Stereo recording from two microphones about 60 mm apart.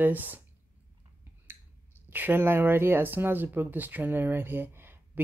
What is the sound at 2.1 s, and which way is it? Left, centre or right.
Speech, right.